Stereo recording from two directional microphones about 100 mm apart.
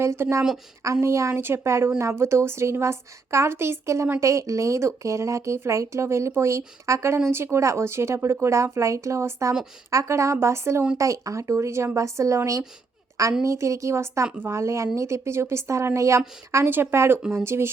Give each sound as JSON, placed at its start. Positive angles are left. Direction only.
{"t": 0.0, "sound": "speech", "side_deg": -30}
{"t": 13.4, "sound": "speech", "side_deg": -30}